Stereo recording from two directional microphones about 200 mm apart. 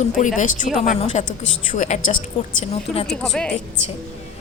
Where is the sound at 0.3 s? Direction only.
40° left (ahead or behind).